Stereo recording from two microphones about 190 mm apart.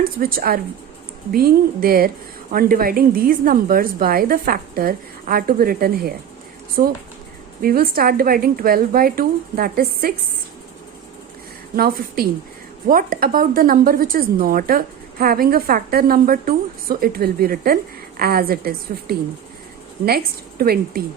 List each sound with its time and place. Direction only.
0.0 s speech: 50° right (ahead or behind)
11.8 s speech: 50° right (ahead or behind)